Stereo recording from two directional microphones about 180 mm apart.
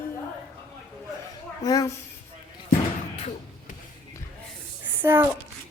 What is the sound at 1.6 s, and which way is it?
Speech, 20° left (ahead or behind).